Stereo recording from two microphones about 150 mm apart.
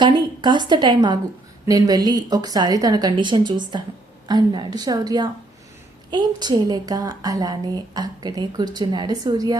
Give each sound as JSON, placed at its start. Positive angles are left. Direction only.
{"t": 0.0, "sound": "a woman's voice", "side_deg": -30}